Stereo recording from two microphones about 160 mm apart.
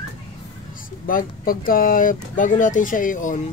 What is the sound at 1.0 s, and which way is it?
Speech, 60° left (ahead or behind).